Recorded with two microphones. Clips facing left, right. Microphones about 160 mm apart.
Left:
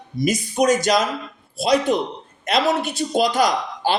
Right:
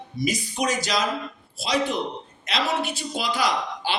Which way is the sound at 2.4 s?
50° left (ahead or behind).